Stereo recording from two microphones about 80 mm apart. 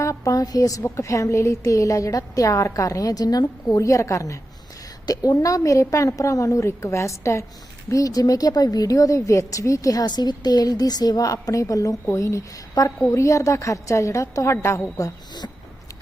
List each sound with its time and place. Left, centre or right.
0.0 s a sound: left
0.8 s a woman's voice: left
5.0 s a woman's voice: left